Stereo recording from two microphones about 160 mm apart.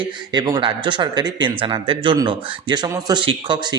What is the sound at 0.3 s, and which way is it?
Speech, 25° right (ahead or behind).